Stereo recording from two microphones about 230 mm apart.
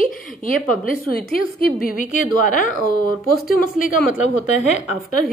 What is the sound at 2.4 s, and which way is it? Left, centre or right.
A woman's voice, left.